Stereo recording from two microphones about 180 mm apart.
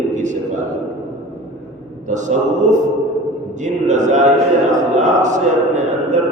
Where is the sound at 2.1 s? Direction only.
40° right (ahead or behind).